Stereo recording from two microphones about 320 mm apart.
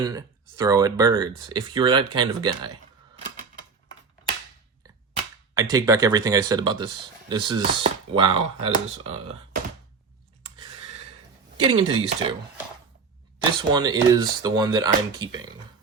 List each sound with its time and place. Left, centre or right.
0.0 s speech: centre
5.5 s speech: centre
10.4 s a sound: centre
11.6 s speech: centre
13.6 s speech: centre